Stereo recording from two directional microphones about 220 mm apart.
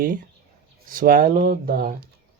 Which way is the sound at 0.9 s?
40° right (ahead or behind).